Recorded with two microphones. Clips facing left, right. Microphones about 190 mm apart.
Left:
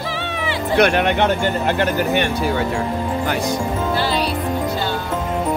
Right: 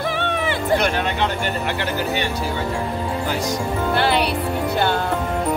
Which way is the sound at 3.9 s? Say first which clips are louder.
Right 3 dB; 60° right (ahead or behind).